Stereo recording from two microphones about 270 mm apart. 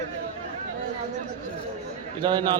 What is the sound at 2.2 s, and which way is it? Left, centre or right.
Speech, centre.